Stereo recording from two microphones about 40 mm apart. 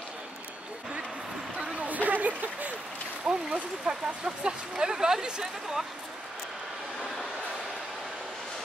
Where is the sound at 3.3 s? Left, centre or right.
Right.